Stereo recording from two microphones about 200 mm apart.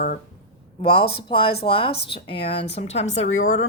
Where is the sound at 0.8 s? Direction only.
30° left (ahead or behind).